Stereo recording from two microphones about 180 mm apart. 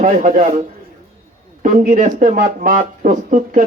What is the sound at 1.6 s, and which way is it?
Speech, 45° right (ahead or behind).